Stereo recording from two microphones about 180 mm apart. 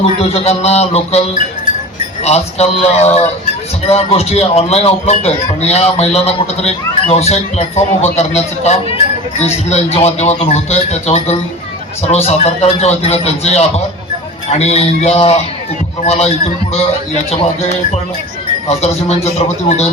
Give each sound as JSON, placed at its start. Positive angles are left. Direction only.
{"t": 0.2, "sound": "speech", "side_deg": 35}
{"t": 2.2, "sound": "speech", "side_deg": 35}
{"t": 17.3, "sound": "speech", "side_deg": 35}